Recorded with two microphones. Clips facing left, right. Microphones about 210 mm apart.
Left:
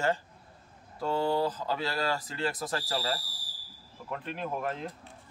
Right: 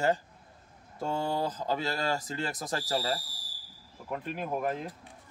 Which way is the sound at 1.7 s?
20° right (ahead or behind).